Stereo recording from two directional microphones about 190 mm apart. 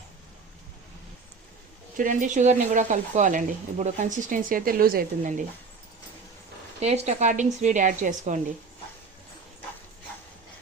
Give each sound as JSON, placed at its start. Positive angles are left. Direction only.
{"t": 2.0, "sound": "speech", "side_deg": -40}
{"t": 6.7, "sound": "speech", "side_deg": -35}